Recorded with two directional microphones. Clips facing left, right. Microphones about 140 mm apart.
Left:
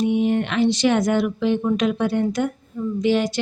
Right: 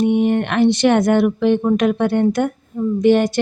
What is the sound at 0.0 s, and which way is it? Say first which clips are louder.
Speech: right 4 dB; 60° right (ahead or behind).